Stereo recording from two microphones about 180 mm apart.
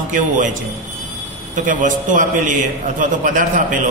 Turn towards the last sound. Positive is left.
turn(degrees=-45)  # may be behind; listen again after turning